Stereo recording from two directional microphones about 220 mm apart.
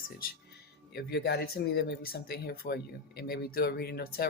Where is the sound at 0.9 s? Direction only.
50° left (ahead or behind).